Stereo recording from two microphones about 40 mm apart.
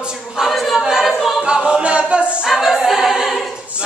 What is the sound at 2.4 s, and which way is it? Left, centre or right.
Choir, centre.